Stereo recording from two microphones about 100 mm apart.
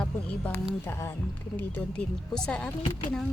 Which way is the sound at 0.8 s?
25° left (ahead or behind).